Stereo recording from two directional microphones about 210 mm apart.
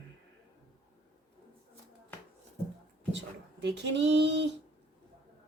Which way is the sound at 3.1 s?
60° right (ahead or behind).